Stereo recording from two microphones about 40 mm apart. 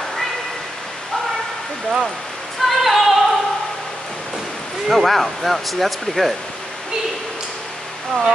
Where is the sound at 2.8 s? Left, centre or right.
Centre.